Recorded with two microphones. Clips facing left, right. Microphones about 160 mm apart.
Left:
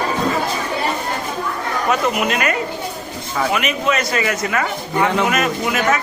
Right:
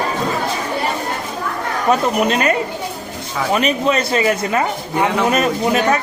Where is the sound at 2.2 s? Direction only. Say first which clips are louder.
Right 3 dB; 30° right (ahead or behind).